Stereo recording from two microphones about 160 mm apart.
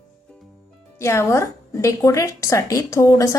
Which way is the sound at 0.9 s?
15° left (ahead or behind).